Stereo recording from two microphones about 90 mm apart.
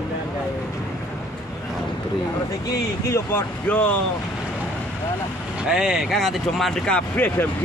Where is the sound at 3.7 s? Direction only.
15° left (ahead or behind).